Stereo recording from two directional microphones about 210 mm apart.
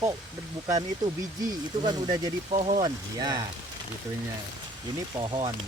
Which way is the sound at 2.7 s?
20° right (ahead or behind).